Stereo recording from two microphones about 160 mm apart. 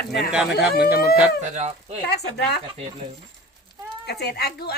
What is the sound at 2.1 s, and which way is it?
Speech, 90° left.